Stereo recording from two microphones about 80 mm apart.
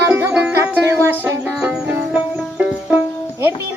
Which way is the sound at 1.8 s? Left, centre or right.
Right.